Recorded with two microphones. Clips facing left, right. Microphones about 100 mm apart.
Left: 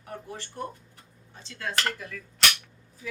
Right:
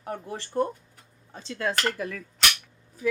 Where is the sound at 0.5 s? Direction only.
45° right (ahead or behind).